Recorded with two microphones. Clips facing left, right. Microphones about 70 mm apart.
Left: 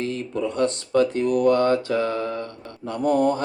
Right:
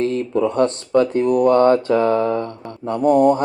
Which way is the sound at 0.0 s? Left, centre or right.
Right.